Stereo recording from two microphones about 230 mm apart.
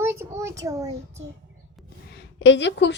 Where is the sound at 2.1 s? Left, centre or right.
Left.